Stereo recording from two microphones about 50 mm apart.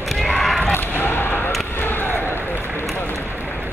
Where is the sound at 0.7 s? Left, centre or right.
Left.